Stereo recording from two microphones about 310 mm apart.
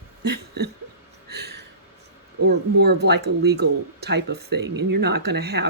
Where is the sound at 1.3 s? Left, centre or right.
Right.